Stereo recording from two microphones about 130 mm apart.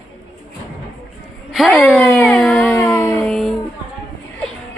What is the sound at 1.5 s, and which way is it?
Speech, centre (ahead or behind).